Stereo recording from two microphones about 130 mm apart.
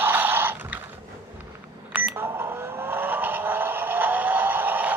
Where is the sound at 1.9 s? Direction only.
15° right (ahead or behind).